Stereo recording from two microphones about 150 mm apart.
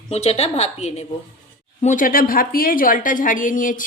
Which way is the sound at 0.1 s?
45° left (ahead or behind).